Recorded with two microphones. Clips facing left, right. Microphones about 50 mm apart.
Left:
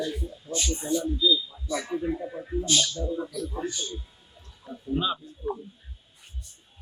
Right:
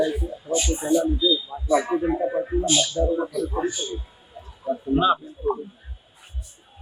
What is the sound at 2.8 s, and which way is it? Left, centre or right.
A man's voice, centre.